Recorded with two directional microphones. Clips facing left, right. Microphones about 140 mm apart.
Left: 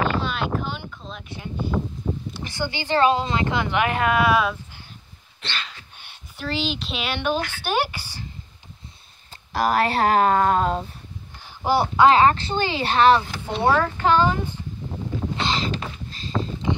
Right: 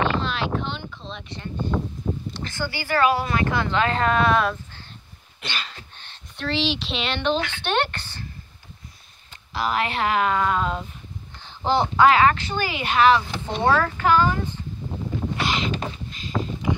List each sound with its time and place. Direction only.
0.0 s a sound: centre (ahead or behind)
2.4 s speech: 15° left (ahead or behind)
5.4 s a sound: 10° right (ahead or behind)
5.9 s speech: 10° left (ahead or behind)
9.5 s speech: 45° left (ahead or behind)
11.4 s speech: 10° left (ahead or behind)
12.1 s speech: 30° left (ahead or behind)
13.5 s speech: 10° left (ahead or behind)
15.3 s boat: 30° left (ahead or behind)
16.1 s vehicle: 30° left (ahead or behind)